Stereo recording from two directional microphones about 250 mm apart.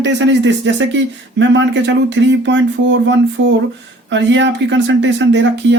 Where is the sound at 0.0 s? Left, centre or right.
Right.